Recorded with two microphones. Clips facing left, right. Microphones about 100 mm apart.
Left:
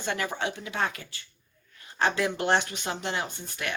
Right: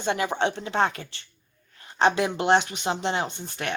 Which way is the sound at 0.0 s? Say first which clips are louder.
Right 6 dB; 25° right (ahead or behind).